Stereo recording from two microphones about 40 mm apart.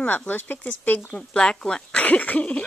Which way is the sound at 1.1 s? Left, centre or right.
Left.